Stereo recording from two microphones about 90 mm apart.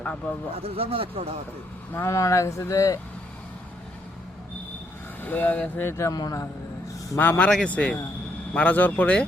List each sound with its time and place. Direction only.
0.0 s speech: 15° left (ahead or behind)
0.5 s speech: 90° right
1.9 s speech: 25° left (ahead or behind)
2.1 s speech: 35° left (ahead or behind)
5.2 s speech: 20° left (ahead or behind)
6.1 s a man's voice: 45° left (ahead or behind)
7.2 s speech: 20° left (ahead or behind)